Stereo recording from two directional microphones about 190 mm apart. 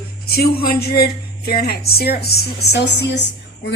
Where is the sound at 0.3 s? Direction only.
55° left (ahead or behind).